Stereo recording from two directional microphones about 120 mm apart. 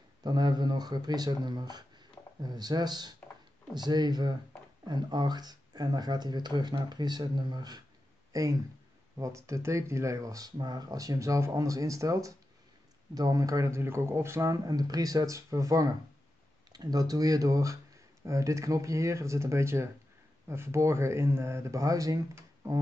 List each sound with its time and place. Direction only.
0.2 s speech: 35° right (ahead or behind)